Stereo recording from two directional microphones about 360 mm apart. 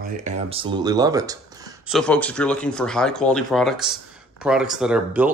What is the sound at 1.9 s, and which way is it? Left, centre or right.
Speech, centre.